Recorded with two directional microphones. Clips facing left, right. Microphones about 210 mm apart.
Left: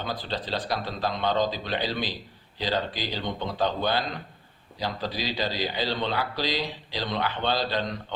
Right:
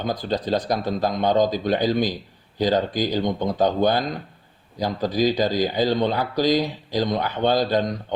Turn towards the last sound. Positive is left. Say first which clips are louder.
# right 7 dB
turn(degrees=-45)  # may be behind; listen again after turning